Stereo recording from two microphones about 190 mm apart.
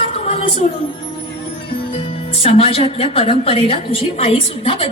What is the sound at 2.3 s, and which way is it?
A woman's voice, 30° left (ahead or behind).